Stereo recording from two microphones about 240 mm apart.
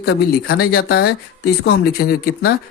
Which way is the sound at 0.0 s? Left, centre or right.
Left.